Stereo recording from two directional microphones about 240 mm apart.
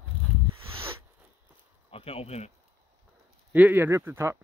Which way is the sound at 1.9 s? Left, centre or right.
Left.